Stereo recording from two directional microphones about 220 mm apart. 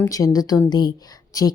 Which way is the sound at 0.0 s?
15° left (ahead or behind).